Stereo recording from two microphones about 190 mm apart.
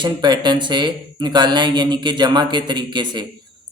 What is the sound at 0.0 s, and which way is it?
Mantra, 25° right (ahead or behind).